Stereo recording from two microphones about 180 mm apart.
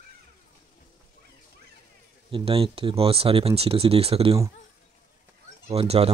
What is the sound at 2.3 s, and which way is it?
Speech, 30° right (ahead or behind).